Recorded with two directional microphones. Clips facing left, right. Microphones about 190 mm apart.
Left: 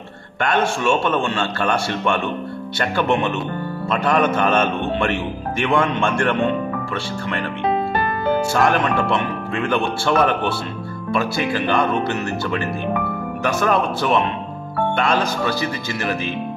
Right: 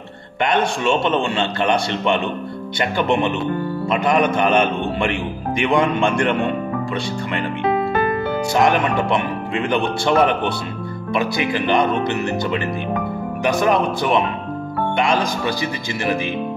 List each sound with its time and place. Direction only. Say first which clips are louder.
0.4 s a man's voice: right 1 dB; 20° right (ahead or behind)
8.5 s a man's voice: right 5 dB; 15° right (ahead or behind)